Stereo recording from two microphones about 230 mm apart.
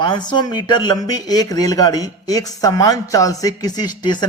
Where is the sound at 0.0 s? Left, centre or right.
Centre.